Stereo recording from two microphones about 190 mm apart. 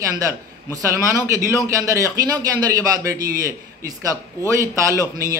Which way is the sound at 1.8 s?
15° right (ahead or behind).